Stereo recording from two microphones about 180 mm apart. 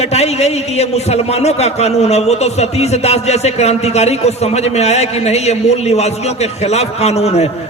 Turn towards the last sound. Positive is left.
turn(degrees=35)  # may be behind; listen again after turning